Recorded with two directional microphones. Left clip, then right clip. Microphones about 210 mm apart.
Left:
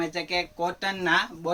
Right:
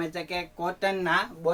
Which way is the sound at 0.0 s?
15° right (ahead or behind).